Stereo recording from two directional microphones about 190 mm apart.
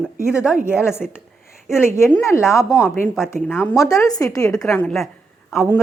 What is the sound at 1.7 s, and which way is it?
A woman's voice, 15° left (ahead or behind).